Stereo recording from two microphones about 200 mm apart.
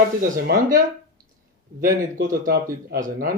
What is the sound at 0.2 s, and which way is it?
Speech, 45° right (ahead or behind).